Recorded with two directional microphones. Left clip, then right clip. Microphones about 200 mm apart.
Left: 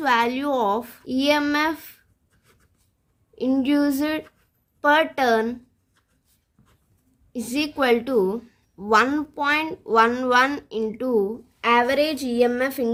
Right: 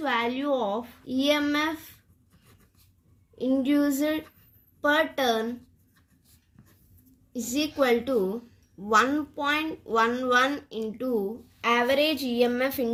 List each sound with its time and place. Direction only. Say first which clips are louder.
0.0 s a woman's voice: left 6 dB; 60° left (ahead or behind)
3.3 s a woman's voice: left 3 dB; 55° left (ahead or behind)
7.3 s a woman's voice: left 2 dB; 55° left (ahead or behind)